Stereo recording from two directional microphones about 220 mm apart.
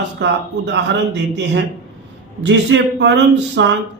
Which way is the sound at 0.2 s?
50° right (ahead or behind).